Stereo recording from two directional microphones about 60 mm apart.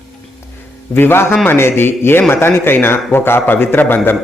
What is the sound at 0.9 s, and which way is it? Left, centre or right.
A man's voice, left.